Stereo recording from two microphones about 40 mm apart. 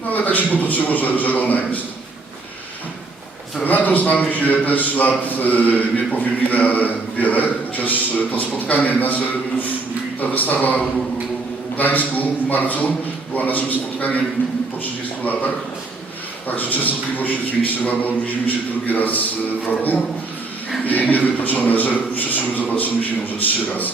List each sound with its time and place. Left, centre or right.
0.1 s a man's voice: left
3.6 s a man's voice: left
15.2 s a man's voice: left
16.5 s a man's voice: left
20.8 s a man's voice: left